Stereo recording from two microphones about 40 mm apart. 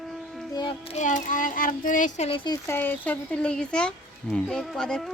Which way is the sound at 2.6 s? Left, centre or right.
Left.